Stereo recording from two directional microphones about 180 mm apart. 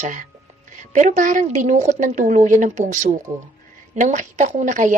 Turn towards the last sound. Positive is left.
turn(degrees=-45)  # may be behind; listen again after turning